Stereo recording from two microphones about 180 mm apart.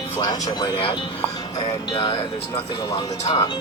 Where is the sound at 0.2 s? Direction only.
25° left (ahead or behind).